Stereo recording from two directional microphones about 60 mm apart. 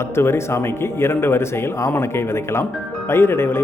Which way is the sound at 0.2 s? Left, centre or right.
Left.